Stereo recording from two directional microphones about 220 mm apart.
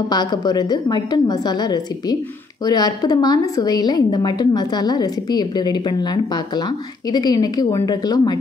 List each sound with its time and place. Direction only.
0.1 s a woman's voice: 20° left (ahead or behind)